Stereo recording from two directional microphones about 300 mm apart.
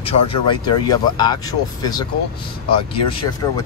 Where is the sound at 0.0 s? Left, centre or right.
Centre.